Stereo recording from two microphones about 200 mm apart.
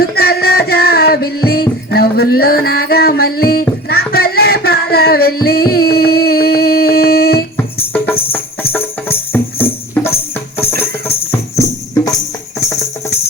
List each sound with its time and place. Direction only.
0.0 s music: 50° left (ahead or behind)
7.5 s music: 10° left (ahead or behind)
11.3 s music: 15° left (ahead or behind)